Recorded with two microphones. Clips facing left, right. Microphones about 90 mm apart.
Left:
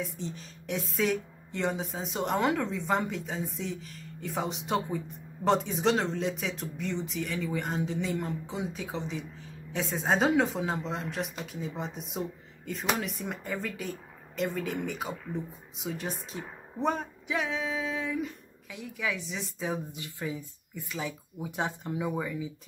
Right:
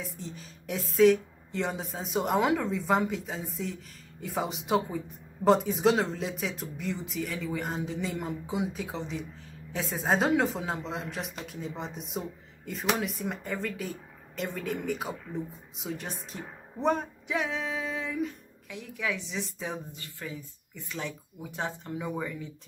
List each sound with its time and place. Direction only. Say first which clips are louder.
0.0 s a woman's voice: left 3 dB; centre (ahead or behind)
8.3 s speech: right 3 dB; 10° right (ahead or behind)
8.7 s a woman's voice: even; centre (ahead or behind)
19.9 s speech: left 4 dB; 15° left (ahead or behind)
21.9 s a woman's voice: left 3 dB; 5° left (ahead or behind)